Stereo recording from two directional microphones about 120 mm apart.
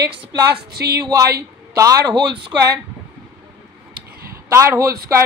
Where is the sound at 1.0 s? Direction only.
25° right (ahead or behind).